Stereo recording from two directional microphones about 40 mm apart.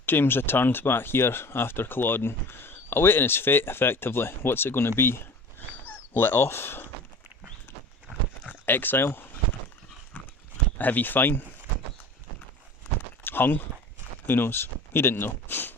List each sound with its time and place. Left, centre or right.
0.0 s speech: left
8.4 s speech: left
10.1 s horse: left
10.8 s speech: left
13.2 s a sound: left
14.3 s speech: left